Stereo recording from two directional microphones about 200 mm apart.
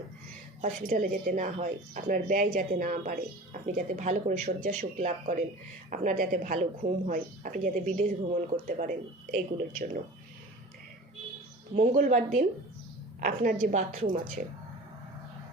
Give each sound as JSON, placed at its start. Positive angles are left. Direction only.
{"t": 0.6, "sound": "speech", "side_deg": -40}
{"t": 11.8, "sound": "speech", "side_deg": -40}
{"t": 13.2, "sound": "speech", "side_deg": -45}